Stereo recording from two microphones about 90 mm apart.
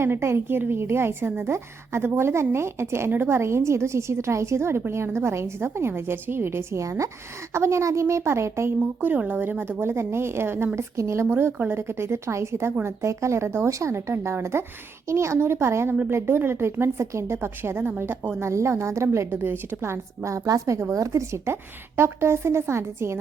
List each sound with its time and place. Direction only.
0.0 s a woman's voice: 30° right (ahead or behind)